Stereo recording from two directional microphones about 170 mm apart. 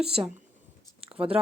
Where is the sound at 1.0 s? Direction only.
35° right (ahead or behind).